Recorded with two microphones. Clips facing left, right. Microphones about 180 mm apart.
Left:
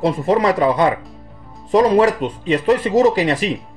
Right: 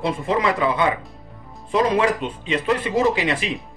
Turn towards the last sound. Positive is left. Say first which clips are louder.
# left 5 dB
turn(degrees=40)  # may be behind; listen again after turning